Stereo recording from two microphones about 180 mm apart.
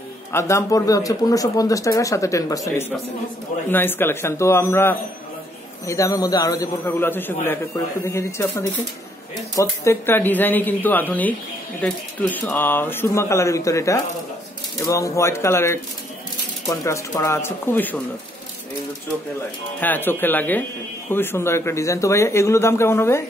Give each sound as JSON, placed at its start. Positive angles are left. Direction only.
{"t": 0.3, "sound": "a man's voice", "side_deg": 15}
{"t": 19.8, "sound": "a man's voice", "side_deg": 10}